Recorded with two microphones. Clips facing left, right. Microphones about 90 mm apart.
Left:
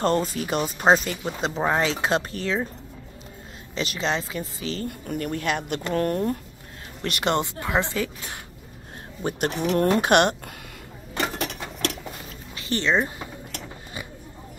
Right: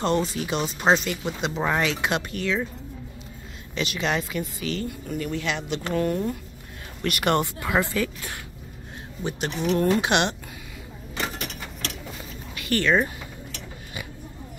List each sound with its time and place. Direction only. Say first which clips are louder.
0.0 s speech: left 1 dB; 45° left (ahead or behind)
3.7 s speech: even; 35° left (ahead or behind)
4.8 s speech: left 1 dB; 50° left (ahead or behind)
7.0 s a woman's voice: right 1 dB; 30° left (ahead or behind)
9.2 s speech: left 2 dB; 50° left (ahead or behind)
12.5 s speech: right 1 dB; 25° left (ahead or behind)